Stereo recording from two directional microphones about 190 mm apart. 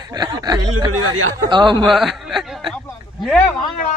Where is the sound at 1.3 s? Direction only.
25° right (ahead or behind).